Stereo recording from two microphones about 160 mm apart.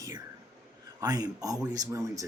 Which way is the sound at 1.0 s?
25° right (ahead or behind).